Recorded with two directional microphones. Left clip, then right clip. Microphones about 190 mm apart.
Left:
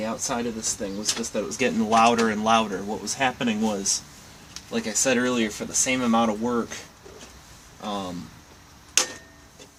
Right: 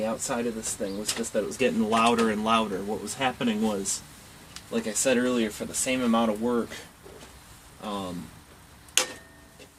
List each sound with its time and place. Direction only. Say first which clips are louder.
0.0 s speech: left 1 dB; 10° left (ahead or behind)
7.8 s speech: left 3 dB; 15° left (ahead or behind)